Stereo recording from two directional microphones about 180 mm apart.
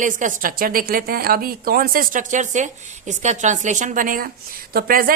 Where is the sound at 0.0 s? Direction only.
45° right (ahead or behind).